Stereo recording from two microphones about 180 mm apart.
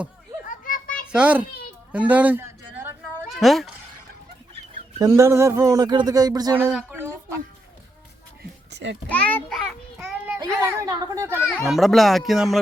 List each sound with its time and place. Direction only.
0.4 s children playing: 50° left (ahead or behind)
1.0 s a child's voice: 5° right (ahead or behind)
1.9 s a sound: 10° right (ahead or behind)
3.2 s speech: centre (ahead or behind)
4.9 s speech: 20° right (ahead or behind)
6.7 s speech: 5° right (ahead or behind)
8.7 s child singing: 85° right
9.0 s a child's voice: 10° left (ahead or behind)
10.0 s child singing: 10° right (ahead or behind)
10.4 s a child's voice: 20° right (ahead or behind)
11.4 s speech: 5° left (ahead or behind)